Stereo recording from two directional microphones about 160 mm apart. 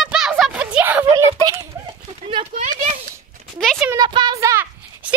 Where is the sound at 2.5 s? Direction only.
50° right (ahead or behind).